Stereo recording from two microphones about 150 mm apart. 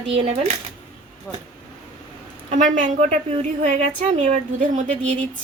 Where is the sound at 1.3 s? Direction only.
10° left (ahead or behind).